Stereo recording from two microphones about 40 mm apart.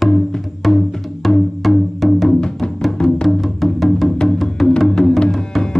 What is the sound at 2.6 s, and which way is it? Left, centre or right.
Music, left.